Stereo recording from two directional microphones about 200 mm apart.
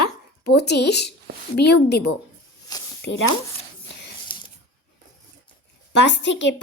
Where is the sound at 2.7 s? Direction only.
20° left (ahead or behind).